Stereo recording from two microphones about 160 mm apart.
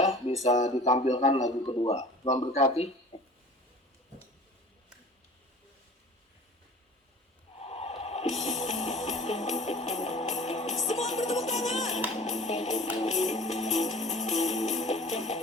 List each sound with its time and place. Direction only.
0.0 s a sound: 40° left (ahead or behind)
0.4 s speech: 50° left (ahead or behind)
1.6 s a man's voice: 30° left (ahead or behind)
7.6 s snort: 40° left (ahead or behind)
8.4 s music: 45° left (ahead or behind)